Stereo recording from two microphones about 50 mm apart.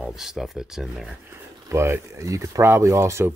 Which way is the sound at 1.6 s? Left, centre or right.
Right.